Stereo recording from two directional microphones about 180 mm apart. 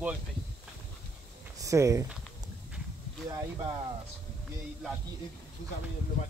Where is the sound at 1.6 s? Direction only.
15° right (ahead or behind).